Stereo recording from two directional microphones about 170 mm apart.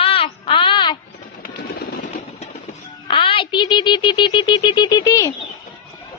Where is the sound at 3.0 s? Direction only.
30° left (ahead or behind).